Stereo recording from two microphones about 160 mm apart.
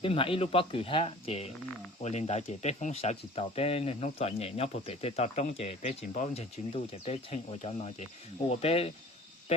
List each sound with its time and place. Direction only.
0.0 s speech: 35° left (ahead or behind)